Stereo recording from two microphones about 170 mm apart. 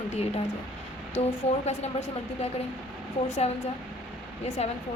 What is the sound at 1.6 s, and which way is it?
A woman's voice, 40° left (ahead or behind).